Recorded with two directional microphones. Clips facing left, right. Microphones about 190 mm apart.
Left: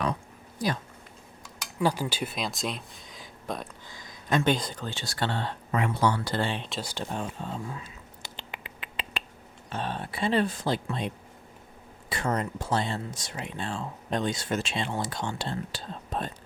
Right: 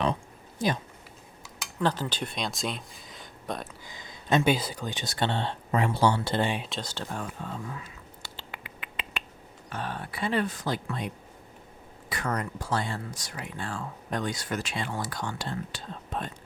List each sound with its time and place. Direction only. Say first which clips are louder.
0.6 s speech: right 2 dB; 25° right (ahead or behind)
1.8 s speech: left 1 dB; 10° left (ahead or behind)
3.8 s a sound: right 3 dB; 20° right (ahead or behind)
4.4 s speech: right 1 dB; 10° right (ahead or behind)
6.6 s speech: even; centre (ahead or behind)
6.8 s a sound: left 2 dB; 15° left (ahead or behind); by 9.2 s 30° left (ahead or behind)
9.6 s speech: left 2 dB; 25° left (ahead or behind)